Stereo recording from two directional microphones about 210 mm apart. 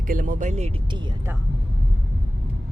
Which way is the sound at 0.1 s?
40° right (ahead or behind).